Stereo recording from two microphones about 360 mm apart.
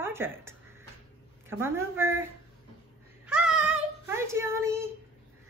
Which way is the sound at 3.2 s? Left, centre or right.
Centre.